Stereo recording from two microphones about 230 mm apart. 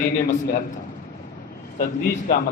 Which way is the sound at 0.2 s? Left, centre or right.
Left.